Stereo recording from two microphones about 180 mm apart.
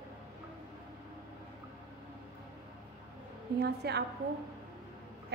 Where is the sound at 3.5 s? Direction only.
65° right (ahead or behind).